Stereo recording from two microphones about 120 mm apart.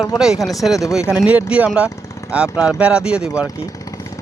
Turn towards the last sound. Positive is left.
turn(degrees=-10)  # may be behind; listen again after turning